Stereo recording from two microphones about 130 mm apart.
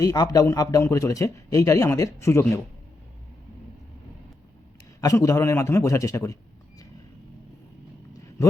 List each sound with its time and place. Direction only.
0.0 s speech: 30° left (ahead or behind)
4.9 s speech: 25° left (ahead or behind)